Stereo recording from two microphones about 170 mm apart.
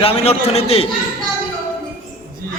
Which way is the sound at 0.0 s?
35° left (ahead or behind).